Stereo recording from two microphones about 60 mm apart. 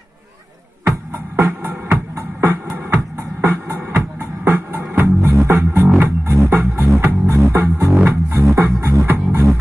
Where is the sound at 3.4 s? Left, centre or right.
Right.